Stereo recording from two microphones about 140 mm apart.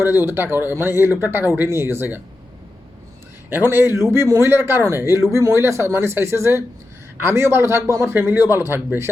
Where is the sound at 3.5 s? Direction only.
15° right (ahead or behind).